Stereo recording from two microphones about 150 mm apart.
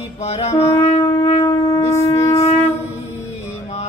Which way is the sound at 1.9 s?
20° left (ahead or behind).